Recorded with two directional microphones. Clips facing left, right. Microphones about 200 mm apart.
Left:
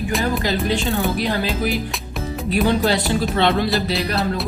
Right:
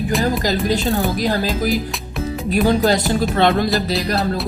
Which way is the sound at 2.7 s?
40° right (ahead or behind).